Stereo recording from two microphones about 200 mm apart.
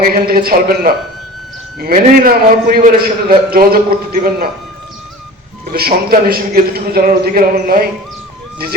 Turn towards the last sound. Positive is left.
turn(degrees=-45)  # may be behind; listen again after turning